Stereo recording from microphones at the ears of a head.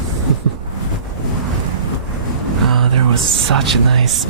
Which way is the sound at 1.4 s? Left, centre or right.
Right.